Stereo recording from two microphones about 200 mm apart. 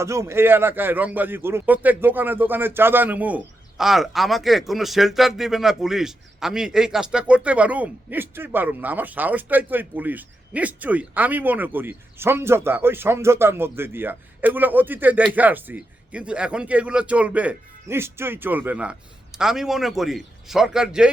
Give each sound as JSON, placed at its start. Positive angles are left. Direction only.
{"t": 0.0, "sound": "a man's voice", "side_deg": -15}